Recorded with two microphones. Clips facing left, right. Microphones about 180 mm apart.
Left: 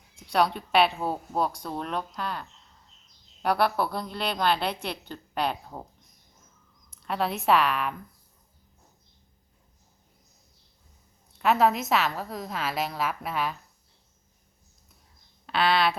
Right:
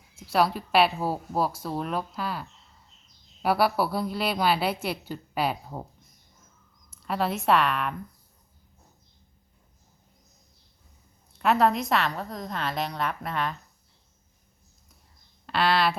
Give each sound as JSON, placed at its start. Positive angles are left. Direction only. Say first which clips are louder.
{"t": 0.2, "sound": "a woman's voice", "louder": "right 1 dB", "side_deg": 0}
{"t": 6.9, "sound": "a woman's voice", "louder": "right 1 dB", "side_deg": 0}
{"t": 11.3, "sound": "a woman's voice", "louder": "even", "side_deg": 0}
{"t": 15.4, "sound": "speech", "louder": "even", "side_deg": 0}